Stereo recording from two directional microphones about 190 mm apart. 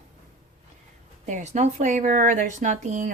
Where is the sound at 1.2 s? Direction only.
40° right (ahead or behind).